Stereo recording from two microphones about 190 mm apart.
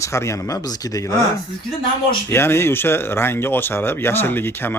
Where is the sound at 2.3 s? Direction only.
15° left (ahead or behind).